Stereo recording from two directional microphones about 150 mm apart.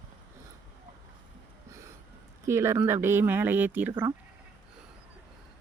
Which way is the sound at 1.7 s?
20° right (ahead or behind).